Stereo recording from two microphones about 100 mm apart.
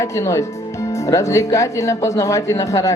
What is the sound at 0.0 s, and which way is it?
Speech, 30° left (ahead or behind).